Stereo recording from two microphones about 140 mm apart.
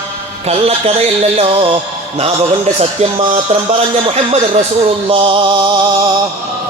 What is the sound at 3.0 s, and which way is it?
A man's voice, 45° right (ahead or behind).